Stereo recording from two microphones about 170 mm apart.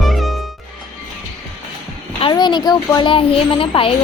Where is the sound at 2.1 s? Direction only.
30° left (ahead or behind).